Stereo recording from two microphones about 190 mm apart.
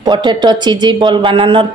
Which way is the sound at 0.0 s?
20° right (ahead or behind).